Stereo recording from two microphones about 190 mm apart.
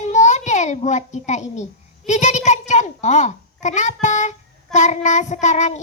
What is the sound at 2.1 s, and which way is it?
A child's voice, 40° left (ahead or behind).